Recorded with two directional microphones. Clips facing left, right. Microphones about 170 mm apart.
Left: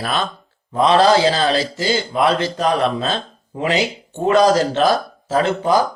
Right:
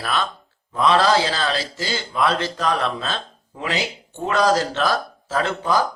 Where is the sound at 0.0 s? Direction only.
25° left (ahead or behind).